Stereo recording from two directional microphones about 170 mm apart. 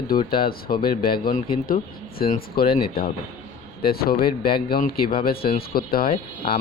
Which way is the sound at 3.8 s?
60° left (ahead or behind).